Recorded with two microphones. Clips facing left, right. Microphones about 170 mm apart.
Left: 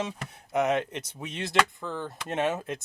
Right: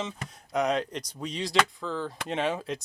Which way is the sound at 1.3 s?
55° left (ahead or behind).